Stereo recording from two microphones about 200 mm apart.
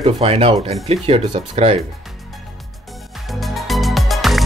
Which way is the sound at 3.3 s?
Centre (ahead or behind).